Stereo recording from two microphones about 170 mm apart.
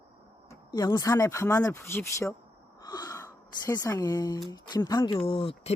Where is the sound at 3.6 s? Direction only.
20° left (ahead or behind).